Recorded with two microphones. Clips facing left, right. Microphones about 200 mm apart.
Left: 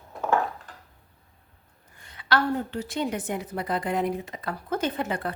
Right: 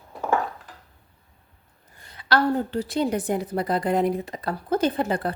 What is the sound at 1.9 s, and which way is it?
A woman's voice, 35° right (ahead or behind).